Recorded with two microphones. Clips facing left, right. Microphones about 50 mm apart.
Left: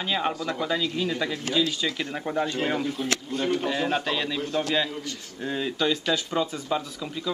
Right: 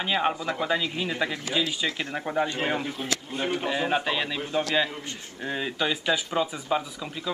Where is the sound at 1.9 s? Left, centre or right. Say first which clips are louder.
Left 1 dB; right.